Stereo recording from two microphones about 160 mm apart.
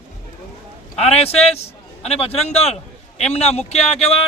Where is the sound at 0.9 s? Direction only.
40° left (ahead or behind).